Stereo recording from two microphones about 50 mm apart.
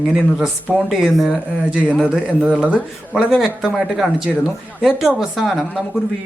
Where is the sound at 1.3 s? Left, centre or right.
Right.